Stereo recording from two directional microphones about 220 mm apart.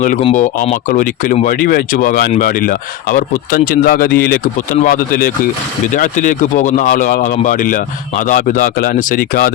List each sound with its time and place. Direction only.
0.2 s speech: 25° left (ahead or behind)
0.4 s speech: 35° left (ahead or behind)